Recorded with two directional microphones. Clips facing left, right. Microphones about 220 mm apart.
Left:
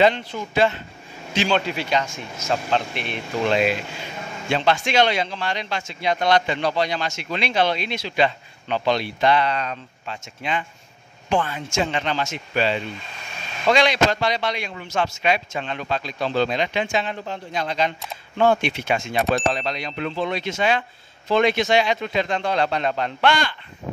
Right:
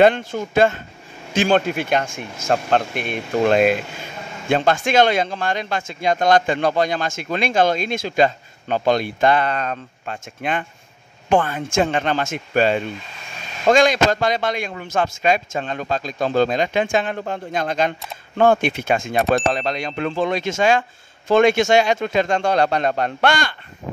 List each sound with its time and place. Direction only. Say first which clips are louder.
0.0 s speech: right 4 dB; 50° right (ahead or behind)